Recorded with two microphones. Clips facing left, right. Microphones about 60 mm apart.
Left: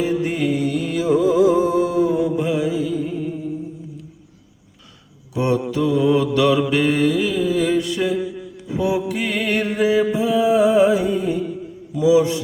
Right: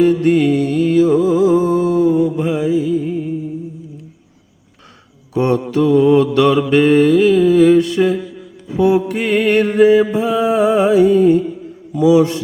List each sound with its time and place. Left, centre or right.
0.3 s mantra: right
1.3 s music: right
5.3 s mantra: right
8.2 s a sound: centre
9.0 s mantra: right